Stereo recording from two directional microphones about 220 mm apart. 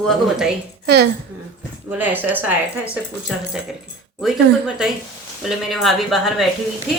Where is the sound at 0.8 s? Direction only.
45° right (ahead or behind).